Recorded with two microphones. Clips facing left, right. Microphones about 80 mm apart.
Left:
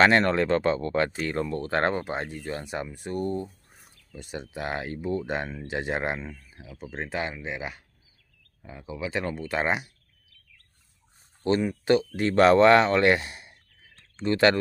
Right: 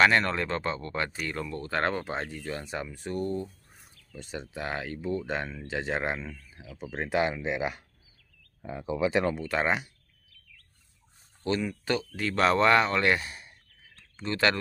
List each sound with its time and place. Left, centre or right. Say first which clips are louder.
0.0 s speech: left 3 dB; left
2.0 s speech: left 2 dB; centre
2.3 s speech: left 2 dB; left
2.6 s speech: left 2 dB; centre
3.1 s speech: left 2 dB; left
4.1 s speech: left 2 dB; centre
6.9 s speech: right 4 dB; centre
9.1 s speech: right 3 dB; centre
9.5 s speech: left 1 dB; centre
11.4 s speech: left 6 dB; left
12.2 s speech: left 6 dB; left
12.5 s speech: left 5 dB; left
13.3 s clicking: left 1 dB; centre
14.2 s speech: left 6 dB; left